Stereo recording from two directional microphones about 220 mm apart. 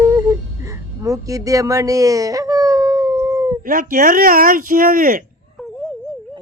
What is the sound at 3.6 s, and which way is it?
Speech, 40° right (ahead or behind).